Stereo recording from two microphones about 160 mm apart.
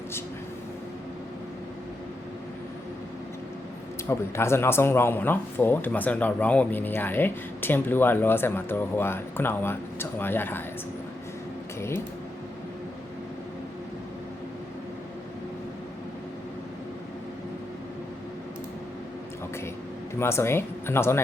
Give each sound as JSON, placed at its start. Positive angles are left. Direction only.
{"t": 4.1, "sound": "speech", "side_deg": 15}
{"t": 20.1, "sound": "speech", "side_deg": 15}